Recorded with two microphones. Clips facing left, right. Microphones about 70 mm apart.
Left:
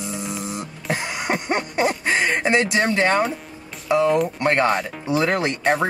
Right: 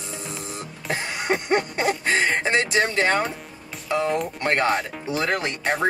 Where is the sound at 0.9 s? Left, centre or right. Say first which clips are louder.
Even; centre.